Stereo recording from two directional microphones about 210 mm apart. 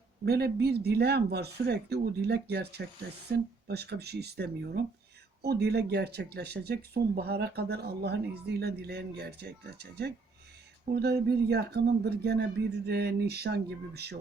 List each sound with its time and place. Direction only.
0.3 s speech: 50° right (ahead or behind)